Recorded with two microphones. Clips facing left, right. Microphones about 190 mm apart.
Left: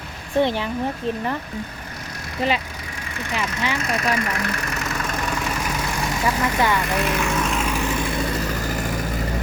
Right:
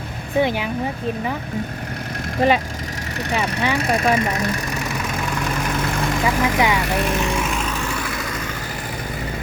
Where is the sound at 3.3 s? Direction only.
60° right (ahead or behind).